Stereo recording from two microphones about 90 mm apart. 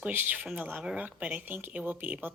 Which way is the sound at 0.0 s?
20° right (ahead or behind).